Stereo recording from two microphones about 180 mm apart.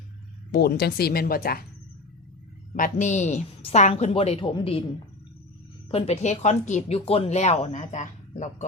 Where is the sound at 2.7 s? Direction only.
45° left (ahead or behind).